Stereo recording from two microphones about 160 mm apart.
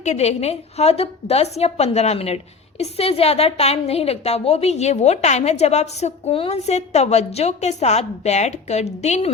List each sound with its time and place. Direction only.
0.0 s a woman's voice: 45° left (ahead or behind)